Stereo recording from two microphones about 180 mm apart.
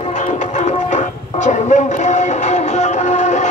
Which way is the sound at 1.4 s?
40° left (ahead or behind).